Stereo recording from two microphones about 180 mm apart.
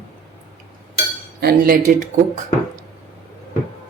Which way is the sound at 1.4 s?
55° right (ahead or behind).